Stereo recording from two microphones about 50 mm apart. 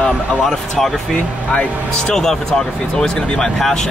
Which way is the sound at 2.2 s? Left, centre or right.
Centre.